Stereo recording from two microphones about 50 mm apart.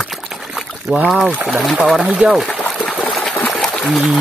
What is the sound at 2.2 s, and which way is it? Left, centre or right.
Speech, right.